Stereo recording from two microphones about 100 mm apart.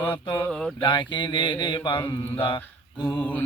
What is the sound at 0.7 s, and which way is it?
Mantra, 55° left (ahead or behind).